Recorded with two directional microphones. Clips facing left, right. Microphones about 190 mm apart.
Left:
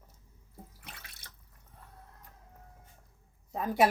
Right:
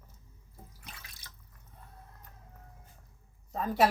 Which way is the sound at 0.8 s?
60° left (ahead or behind).